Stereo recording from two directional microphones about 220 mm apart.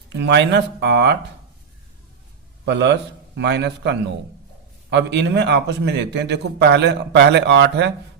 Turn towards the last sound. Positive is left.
turn(degrees=-50)  # may be behind; listen again after turning